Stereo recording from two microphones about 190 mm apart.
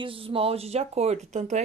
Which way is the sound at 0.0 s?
30° right (ahead or behind).